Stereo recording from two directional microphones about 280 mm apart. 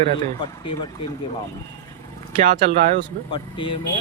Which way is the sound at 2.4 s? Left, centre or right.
Right.